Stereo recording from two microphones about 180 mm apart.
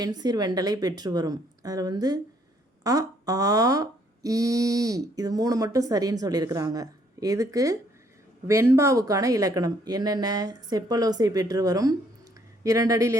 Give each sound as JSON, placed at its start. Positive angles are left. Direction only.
{"t": 0.0, "sound": "speech", "side_deg": -20}